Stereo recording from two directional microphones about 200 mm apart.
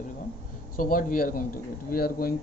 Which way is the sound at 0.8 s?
45° left (ahead or behind).